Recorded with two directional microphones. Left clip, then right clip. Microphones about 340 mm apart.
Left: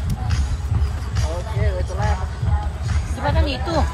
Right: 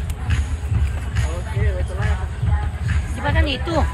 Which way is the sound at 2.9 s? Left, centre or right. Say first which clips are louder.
Even; centre.